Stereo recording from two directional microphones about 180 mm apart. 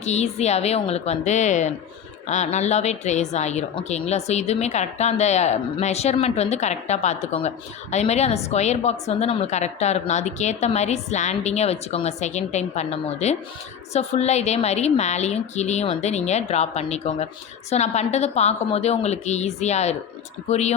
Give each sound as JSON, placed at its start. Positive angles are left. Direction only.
{"t": 0.0, "sound": "speech", "side_deg": 40}